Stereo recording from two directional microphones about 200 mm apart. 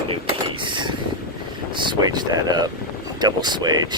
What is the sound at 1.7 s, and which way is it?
Speech, 25° right (ahead or behind).